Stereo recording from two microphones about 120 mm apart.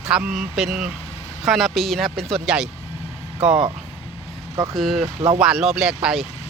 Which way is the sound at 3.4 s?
50° right (ahead or behind).